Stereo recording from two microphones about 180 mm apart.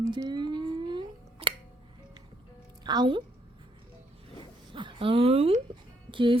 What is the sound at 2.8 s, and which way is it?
Speech, 25° right (ahead or behind).